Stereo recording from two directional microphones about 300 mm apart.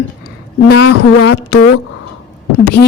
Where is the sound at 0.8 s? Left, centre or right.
Left.